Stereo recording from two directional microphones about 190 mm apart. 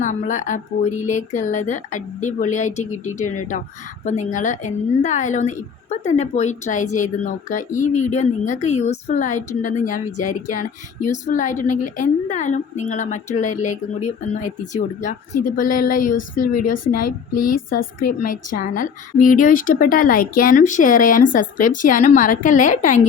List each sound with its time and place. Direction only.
0.0 s a woman's voice: 40° left (ahead or behind)